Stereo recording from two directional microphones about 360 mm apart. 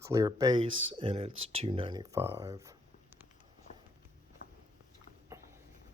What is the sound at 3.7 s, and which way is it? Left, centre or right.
Walk, centre.